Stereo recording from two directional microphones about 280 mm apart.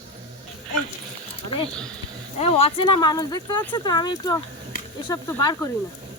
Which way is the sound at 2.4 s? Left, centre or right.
Left.